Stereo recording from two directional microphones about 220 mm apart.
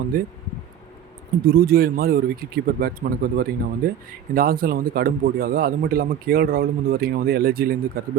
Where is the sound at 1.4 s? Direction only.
45° right (ahead or behind).